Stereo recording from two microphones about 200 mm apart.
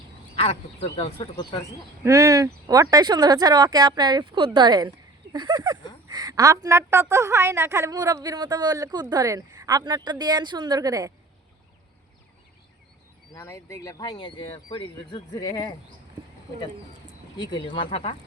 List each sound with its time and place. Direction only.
0.3 s speech: 30° left (ahead or behind)
2.0 s speech: 15° right (ahead or behind)
13.3 s speech: 15° left (ahead or behind)
17.3 s speech: 20° left (ahead or behind)